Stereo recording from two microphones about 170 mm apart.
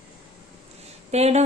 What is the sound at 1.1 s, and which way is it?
Speech, 40° right (ahead or behind).